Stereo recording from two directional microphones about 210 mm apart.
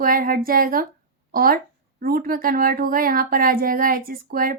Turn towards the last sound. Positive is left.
turn(degrees=-45)  # may be behind; listen again after turning